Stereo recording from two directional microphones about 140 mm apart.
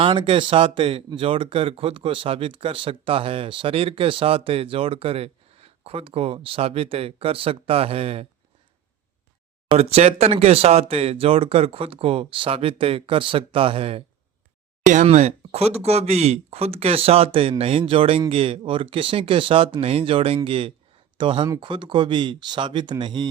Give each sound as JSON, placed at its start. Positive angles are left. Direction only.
{"t": 0.0, "sound": "speech", "side_deg": -35}
{"t": 9.7, "sound": "speech", "side_deg": -50}
{"t": 15.0, "sound": "speech", "side_deg": -50}